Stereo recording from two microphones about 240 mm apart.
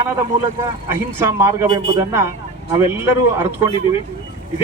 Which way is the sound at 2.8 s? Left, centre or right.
Centre.